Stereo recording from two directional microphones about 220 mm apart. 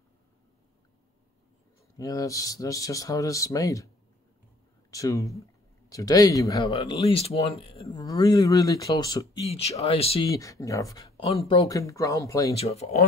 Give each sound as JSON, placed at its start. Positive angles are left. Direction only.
{"t": 2.0, "sound": "speech", "side_deg": 15}
{"t": 4.9, "sound": "speech", "side_deg": 15}
{"t": 6.7, "sound": "speech", "side_deg": 25}
{"t": 10.2, "sound": "speech", "side_deg": 15}
{"t": 12.5, "sound": "speech", "side_deg": 30}